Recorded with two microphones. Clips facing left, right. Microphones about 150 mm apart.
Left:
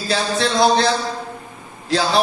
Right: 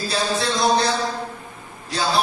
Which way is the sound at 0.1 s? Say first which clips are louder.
Left 4 dB; 90° left.